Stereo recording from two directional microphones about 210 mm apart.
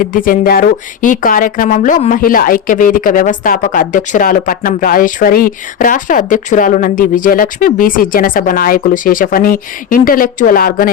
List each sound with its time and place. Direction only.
0.0 s speech: 40° left (ahead or behind)